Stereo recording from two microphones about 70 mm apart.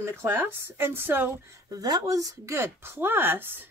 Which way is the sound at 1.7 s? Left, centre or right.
Right.